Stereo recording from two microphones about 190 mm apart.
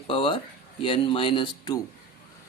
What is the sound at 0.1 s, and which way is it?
Speech, 25° left (ahead or behind).